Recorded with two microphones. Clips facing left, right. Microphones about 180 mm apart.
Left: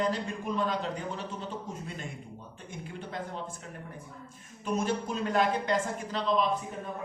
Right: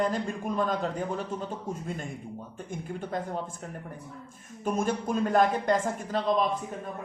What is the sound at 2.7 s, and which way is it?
Speech, 50° right (ahead or behind).